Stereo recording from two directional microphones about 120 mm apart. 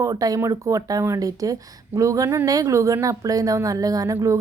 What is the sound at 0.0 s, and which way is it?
Speech, 30° right (ahead or behind).